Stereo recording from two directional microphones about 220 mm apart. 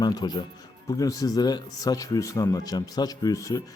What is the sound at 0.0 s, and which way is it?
Speech, 15° left (ahead or behind).